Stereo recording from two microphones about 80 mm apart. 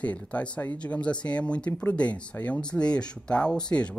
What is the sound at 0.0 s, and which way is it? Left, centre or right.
Speech, centre.